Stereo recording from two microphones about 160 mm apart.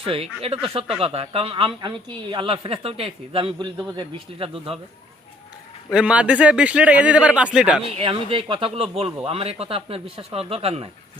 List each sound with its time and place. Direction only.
0.0 s speech: 35° right (ahead or behind)
5.9 s speech: 5° right (ahead or behind)
7.9 s speech: 35° right (ahead or behind)